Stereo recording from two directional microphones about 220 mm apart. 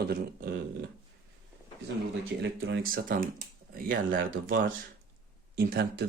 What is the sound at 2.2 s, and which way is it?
Speech, 55° right (ahead or behind).